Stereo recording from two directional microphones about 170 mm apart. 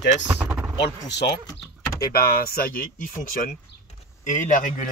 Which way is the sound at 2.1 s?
60° left (ahead or behind).